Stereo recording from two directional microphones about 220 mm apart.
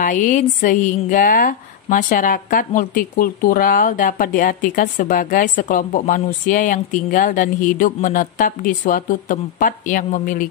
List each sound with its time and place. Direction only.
0.0 s a woman's voice: 35° left (ahead or behind)